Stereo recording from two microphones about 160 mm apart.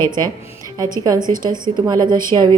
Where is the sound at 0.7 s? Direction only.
25° right (ahead or behind).